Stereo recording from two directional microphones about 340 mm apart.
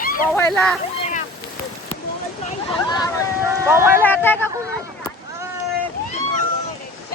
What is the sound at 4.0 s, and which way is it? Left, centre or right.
Speech, centre.